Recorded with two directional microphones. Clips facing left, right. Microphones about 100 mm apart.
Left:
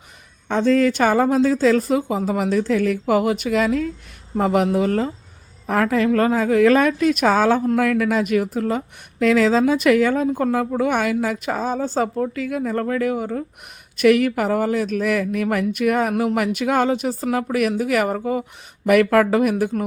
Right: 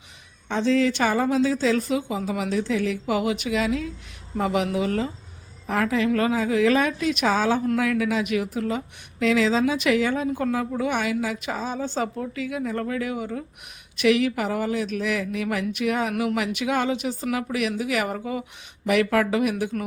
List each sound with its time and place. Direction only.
0.4 s speech: 50° left (ahead or behind)
18.9 s speech: 50° left (ahead or behind)